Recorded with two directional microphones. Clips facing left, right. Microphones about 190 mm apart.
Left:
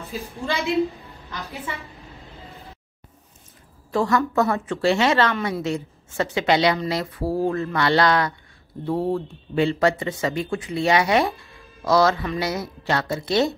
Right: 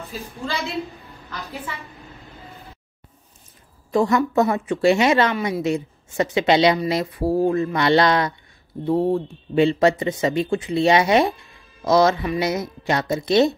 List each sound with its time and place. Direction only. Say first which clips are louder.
0.5 s a woman's voice: left 6 dB; centre (ahead or behind)
3.9 s a woman's voice: right 3 dB; 20° right (ahead or behind)